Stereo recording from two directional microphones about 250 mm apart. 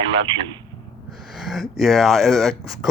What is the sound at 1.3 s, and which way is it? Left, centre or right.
Speech, centre.